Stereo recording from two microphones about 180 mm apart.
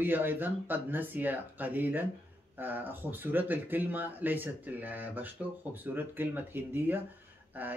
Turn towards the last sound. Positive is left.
turn(degrees=-10)  # may be behind; listen again after turning